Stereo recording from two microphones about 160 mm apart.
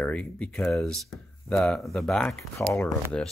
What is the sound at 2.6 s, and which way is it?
Speech, 15° left (ahead or behind).